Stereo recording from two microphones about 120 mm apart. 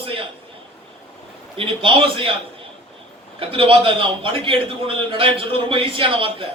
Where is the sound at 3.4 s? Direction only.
50° right (ahead or behind).